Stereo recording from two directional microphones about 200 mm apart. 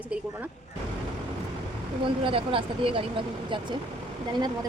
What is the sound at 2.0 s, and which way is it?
Speech, 25° right (ahead or behind).